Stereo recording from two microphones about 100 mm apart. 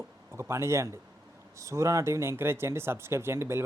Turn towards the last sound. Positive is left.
turn(degrees=-25)  # may be behind; listen again after turning